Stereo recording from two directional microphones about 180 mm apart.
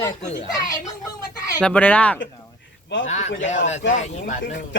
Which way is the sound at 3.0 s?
40° left (ahead or behind).